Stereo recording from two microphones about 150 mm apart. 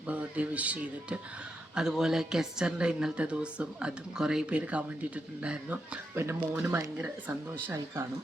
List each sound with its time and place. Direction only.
0.1 s a woman's voice: 10° right (ahead or behind)